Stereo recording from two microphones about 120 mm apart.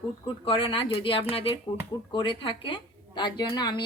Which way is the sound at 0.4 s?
45° left (ahead or behind).